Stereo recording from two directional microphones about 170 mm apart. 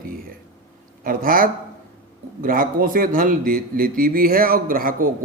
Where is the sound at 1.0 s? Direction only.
55° right (ahead or behind).